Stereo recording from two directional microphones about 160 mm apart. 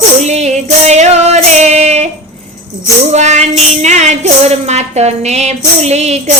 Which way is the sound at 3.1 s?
45° right (ahead or behind).